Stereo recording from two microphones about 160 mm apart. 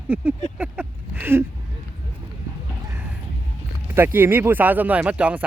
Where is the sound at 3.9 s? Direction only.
15° right (ahead or behind).